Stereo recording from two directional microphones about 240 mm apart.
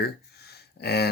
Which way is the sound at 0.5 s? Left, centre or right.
Left.